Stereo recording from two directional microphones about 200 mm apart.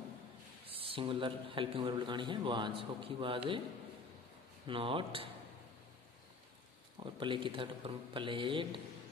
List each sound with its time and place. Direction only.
0.7 s a man's voice: 25° right (ahead or behind)
4.6 s a man's voice: 25° right (ahead or behind)
7.0 s a man's voice: 25° right (ahead or behind)